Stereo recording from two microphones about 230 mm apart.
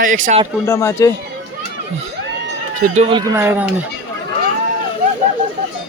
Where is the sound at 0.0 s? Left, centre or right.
Right.